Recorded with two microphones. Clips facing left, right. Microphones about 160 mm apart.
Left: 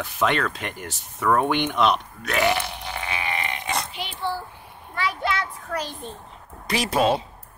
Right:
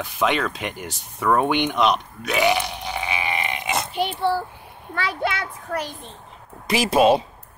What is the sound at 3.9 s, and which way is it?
Speech, 50° right (ahead or behind).